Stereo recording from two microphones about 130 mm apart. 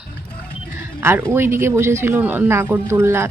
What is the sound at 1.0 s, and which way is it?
Speech, 15° right (ahead or behind).